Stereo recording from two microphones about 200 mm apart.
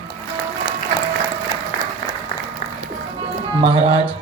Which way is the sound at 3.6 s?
30° right (ahead or behind).